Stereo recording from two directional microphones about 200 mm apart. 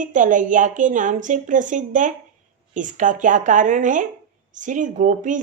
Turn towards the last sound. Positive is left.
turn(degrees=-40)  # may be behind; listen again after turning